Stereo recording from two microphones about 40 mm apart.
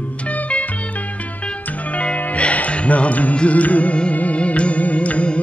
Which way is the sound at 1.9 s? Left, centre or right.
Left.